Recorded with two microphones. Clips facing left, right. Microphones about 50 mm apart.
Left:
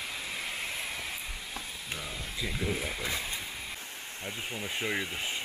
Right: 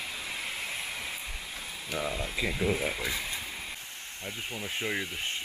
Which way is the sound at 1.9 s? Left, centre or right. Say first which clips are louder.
Right 10 dB; right.